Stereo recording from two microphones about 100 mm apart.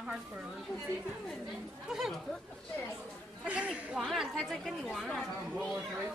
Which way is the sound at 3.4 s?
15° right (ahead or behind).